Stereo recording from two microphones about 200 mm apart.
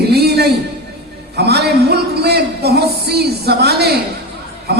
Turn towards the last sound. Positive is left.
turn(degrees=-55)  # may be behind; listen again after turning